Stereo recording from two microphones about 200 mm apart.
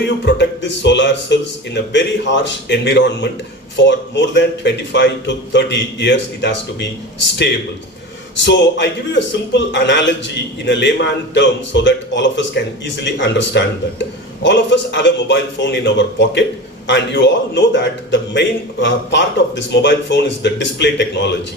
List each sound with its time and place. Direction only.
0.0 s a man's voice: 60° left (ahead or behind)
8.4 s a man's voice: 60° left (ahead or behind)